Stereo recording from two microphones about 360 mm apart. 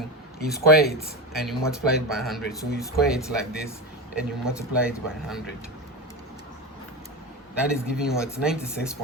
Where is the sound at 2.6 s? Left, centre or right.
Left.